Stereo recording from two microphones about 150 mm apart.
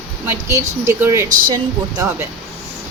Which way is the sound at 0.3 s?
20° right (ahead or behind).